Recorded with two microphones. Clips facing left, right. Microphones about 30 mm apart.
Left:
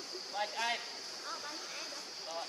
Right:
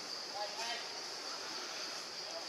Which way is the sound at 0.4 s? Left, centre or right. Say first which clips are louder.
Left 7 dB; left.